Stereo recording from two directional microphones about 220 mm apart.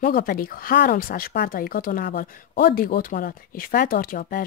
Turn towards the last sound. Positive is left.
turn(degrees=40)  # may be behind; listen again after turning